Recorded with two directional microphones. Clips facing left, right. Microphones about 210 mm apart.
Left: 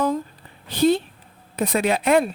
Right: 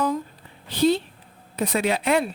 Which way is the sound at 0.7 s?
50° left (ahead or behind).